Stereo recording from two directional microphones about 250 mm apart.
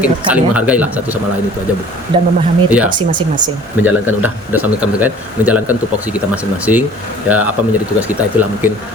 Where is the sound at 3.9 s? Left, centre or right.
Centre.